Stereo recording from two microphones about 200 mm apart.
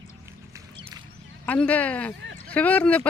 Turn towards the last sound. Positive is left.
turn(degrees=5)  # may be behind; listen again after turning